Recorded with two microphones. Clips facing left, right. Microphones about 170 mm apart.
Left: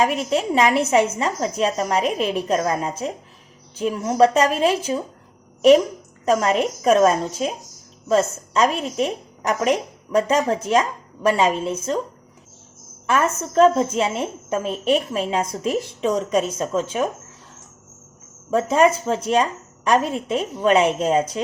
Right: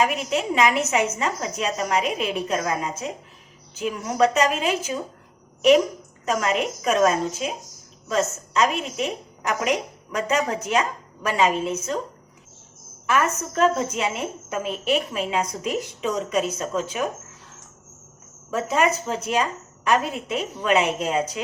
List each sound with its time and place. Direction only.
0.0 s a woman's voice: 30° left (ahead or behind)
6.2 s a woman's voice: 35° left (ahead or behind)
13.1 s a woman's voice: 30° left (ahead or behind)
18.5 s a woman's voice: 30° left (ahead or behind)